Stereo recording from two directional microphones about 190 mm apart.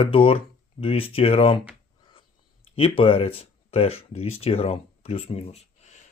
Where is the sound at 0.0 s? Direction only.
30° left (ahead or behind).